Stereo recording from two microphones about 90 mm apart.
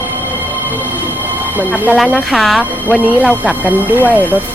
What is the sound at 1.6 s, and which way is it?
Speech, 20° right (ahead or behind).